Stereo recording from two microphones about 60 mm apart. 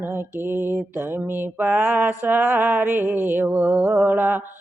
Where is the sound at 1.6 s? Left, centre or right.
Right.